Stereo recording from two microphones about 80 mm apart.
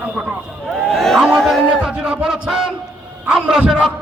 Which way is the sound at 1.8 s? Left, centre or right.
Centre.